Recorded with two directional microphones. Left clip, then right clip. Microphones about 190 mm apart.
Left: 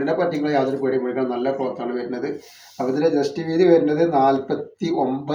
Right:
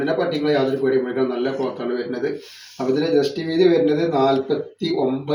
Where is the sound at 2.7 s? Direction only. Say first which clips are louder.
Right 1 dB; 10° left (ahead or behind).